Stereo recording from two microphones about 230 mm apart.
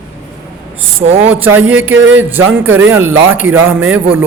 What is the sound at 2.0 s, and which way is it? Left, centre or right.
Music, right.